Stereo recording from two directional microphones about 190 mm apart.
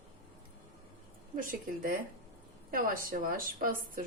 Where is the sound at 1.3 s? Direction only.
45° right (ahead or behind).